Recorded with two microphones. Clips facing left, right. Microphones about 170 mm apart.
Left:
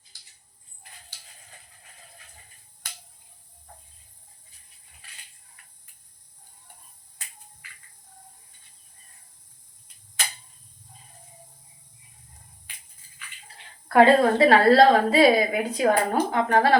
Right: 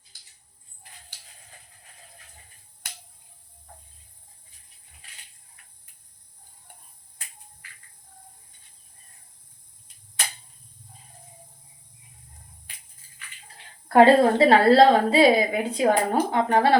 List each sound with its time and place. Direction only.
13.8 s a woman's voice: 35° right (ahead or behind)